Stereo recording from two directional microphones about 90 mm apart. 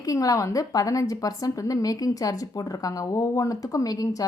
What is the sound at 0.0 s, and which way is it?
A woman's voice, 40° left (ahead or behind).